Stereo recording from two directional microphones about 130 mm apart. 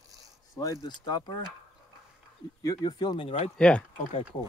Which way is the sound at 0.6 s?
25° left (ahead or behind).